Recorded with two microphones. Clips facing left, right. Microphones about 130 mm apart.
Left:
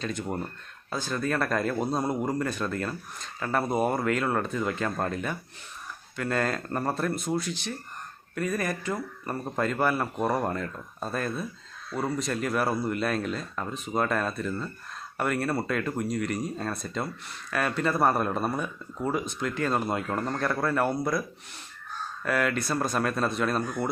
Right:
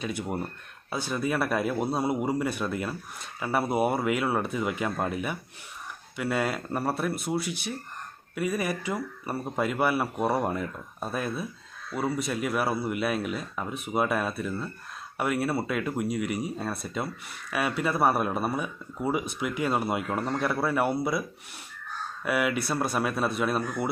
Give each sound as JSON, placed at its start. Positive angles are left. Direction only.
{"t": 0.0, "sound": "speech", "side_deg": -10}